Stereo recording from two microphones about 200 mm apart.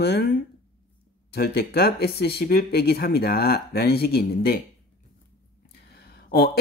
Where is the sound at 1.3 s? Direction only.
50° left (ahead or behind).